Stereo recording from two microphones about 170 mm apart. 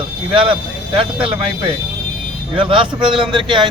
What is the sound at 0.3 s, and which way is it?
Speech, 30° right (ahead or behind).